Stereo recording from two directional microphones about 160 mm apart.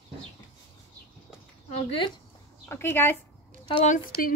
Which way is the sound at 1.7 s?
35° left (ahead or behind).